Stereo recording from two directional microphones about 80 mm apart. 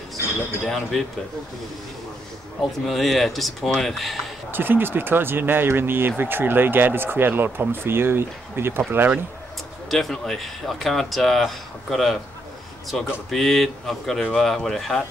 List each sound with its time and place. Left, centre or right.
0.7 s speech: centre
2.9 s speech: centre
4.5 s speech: right
9.8 s speech: centre